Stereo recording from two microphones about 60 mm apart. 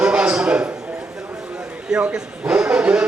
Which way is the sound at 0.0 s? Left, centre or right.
Centre.